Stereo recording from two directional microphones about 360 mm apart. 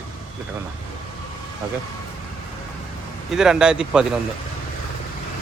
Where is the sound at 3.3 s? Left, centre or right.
Centre.